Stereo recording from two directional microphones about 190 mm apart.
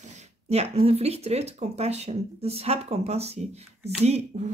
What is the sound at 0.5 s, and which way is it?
Speech, 35° right (ahead or behind).